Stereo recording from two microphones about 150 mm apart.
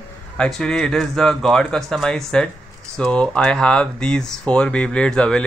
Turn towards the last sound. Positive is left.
turn(degrees=5)  # may be behind; listen again after turning